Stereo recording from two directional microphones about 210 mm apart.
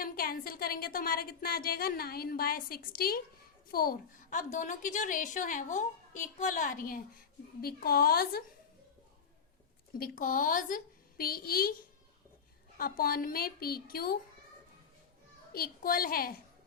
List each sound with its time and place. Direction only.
0.0 s a woman's voice: 45° left (ahead or behind)
10.0 s a woman's voice: 40° left (ahead or behind)
12.7 s a woman's voice: 45° left (ahead or behind)
15.5 s a woman's voice: 45° left (ahead or behind)